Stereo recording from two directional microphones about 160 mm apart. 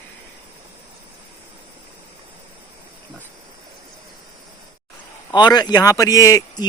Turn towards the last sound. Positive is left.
turn(degrees=20)  # may be behind; listen again after turning